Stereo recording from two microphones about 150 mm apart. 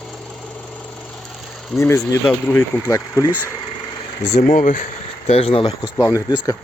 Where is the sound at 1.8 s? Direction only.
20° left (ahead or behind).